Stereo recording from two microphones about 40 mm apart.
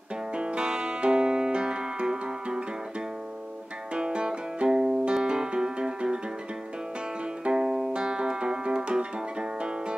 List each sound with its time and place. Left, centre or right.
0.3 s music: right
3.9 s music: right
7.4 s music: centre
7.9 s guitar: right